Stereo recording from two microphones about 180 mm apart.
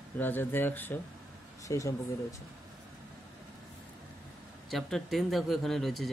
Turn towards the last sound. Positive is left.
turn(degrees=0)  # may be behind; listen again after turning